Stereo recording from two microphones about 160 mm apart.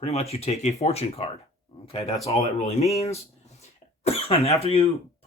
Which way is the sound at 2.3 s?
45° left (ahead or behind).